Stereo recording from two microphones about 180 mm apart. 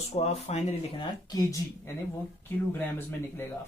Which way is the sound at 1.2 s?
20° left (ahead or behind).